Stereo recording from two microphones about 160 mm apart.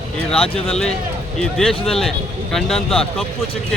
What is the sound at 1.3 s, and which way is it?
Speech, 5° left (ahead or behind).